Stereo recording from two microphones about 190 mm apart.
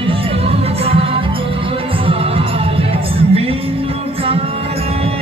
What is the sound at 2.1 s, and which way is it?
Music, 30° right (ahead or behind).